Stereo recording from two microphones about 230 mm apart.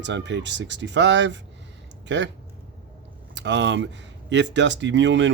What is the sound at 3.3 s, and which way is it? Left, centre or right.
Speech, right.